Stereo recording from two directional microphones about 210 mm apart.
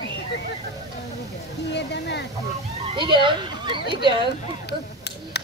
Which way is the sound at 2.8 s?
20° right (ahead or behind).